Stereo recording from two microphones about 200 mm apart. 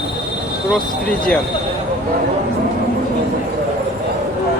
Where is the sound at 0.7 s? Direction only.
5° left (ahead or behind).